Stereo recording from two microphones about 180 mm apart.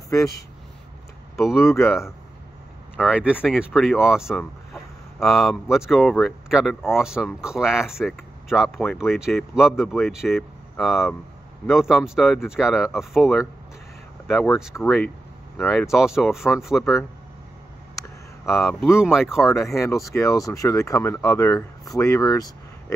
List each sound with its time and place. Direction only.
1.6 s speech: 15° left (ahead or behind)
3.0 s speech: 5° right (ahead or behind)
15.9 s speech: 5° right (ahead or behind)
18.6 s speech: centre (ahead or behind)
19.5 s speech: 15° left (ahead or behind)